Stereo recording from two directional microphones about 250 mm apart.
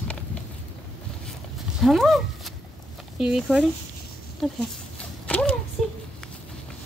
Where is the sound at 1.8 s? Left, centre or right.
Centre.